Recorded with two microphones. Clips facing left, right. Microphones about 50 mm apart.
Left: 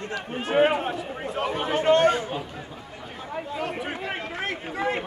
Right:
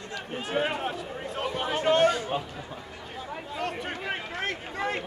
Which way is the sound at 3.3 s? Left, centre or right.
Centre.